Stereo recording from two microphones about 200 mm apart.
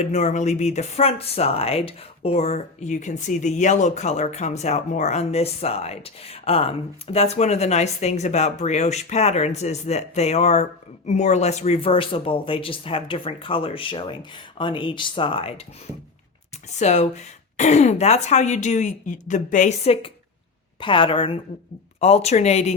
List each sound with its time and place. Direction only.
0.0 s speech: 35° left (ahead or behind)
16.7 s a woman's voice: 35° left (ahead or behind)